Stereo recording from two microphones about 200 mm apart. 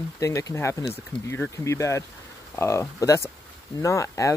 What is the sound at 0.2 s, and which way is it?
Speech, 15° left (ahead or behind).